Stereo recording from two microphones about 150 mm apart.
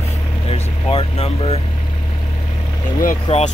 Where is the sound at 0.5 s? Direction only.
40° left (ahead or behind).